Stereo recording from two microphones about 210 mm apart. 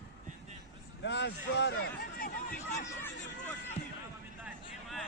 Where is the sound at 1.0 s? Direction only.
55° left (ahead or behind).